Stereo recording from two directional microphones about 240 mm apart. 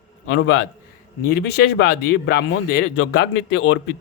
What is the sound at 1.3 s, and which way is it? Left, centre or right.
Speech, left.